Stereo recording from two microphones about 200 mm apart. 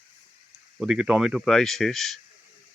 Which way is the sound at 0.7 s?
5° right (ahead or behind).